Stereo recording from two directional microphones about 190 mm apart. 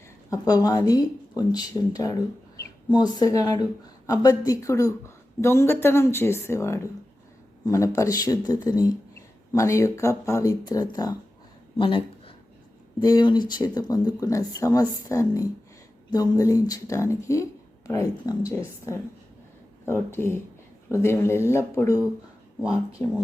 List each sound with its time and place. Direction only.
0.3 s speech: 20° left (ahead or behind)
19.8 s speech: 15° left (ahead or behind)